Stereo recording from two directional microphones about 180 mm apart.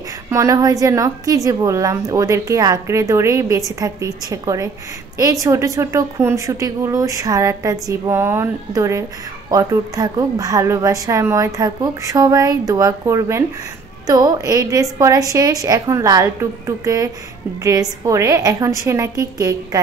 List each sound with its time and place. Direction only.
0.3 s a woman's voice: 15° right (ahead or behind)